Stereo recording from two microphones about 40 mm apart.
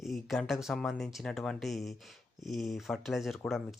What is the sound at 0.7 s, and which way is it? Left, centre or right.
Speech, centre.